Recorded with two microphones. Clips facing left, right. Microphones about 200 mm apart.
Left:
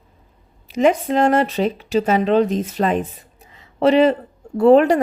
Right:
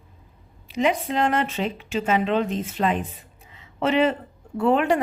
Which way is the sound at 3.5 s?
40° left (ahead or behind).